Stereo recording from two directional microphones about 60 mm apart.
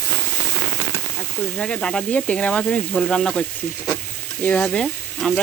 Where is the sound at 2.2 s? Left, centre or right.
Left.